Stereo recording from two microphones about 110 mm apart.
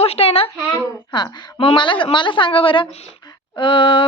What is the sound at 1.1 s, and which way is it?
A woman's voice, 45° left (ahead or behind).